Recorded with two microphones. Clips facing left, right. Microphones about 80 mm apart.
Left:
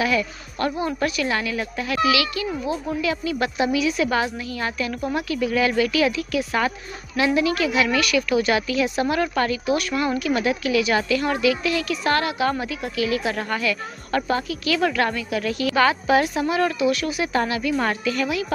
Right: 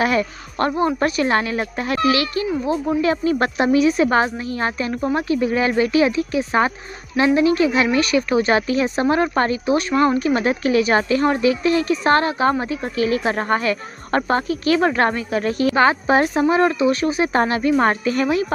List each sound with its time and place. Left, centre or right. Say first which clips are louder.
0.0 s speech: right 3 dB; right